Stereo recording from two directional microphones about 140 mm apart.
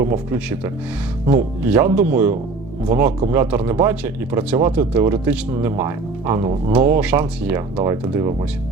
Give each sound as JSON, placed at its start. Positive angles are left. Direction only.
{"t": 0.0, "sound": "speech", "side_deg": -15}